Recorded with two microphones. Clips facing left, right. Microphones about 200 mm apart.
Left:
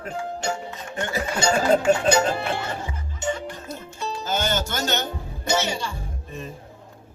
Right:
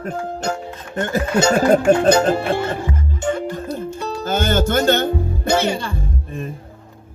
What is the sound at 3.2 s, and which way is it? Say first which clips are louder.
Music: right 5 dB; 55° right (ahead or behind).